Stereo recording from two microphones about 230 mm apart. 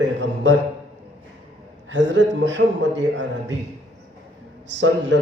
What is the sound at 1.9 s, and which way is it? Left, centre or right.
A man's voice, right.